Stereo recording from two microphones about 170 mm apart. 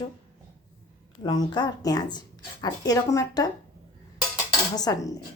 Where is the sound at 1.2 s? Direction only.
25° left (ahead or behind).